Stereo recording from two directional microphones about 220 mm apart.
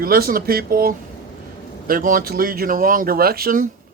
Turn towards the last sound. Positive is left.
turn(degrees=-40)  # may be behind; listen again after turning